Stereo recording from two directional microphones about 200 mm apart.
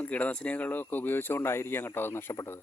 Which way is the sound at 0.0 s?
5° left (ahead or behind).